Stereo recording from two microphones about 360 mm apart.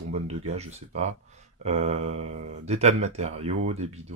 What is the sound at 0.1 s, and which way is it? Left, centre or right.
Speech, centre.